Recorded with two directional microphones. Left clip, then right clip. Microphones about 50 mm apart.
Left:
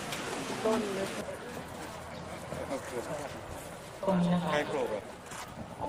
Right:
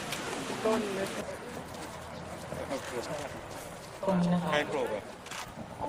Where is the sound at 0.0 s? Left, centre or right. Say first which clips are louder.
Right 1 dB; centre.